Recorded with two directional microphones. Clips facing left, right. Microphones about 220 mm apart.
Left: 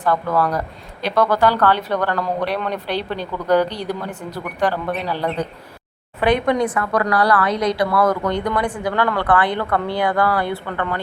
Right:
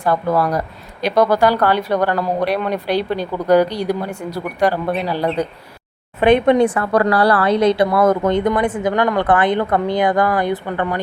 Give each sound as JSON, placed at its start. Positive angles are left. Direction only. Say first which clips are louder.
{"t": 0.0, "sound": "speech", "louder": "right 2 dB", "side_deg": -10}
{"t": 6.1, "sound": "a woman's voice", "louder": "right 5 dB", "side_deg": -25}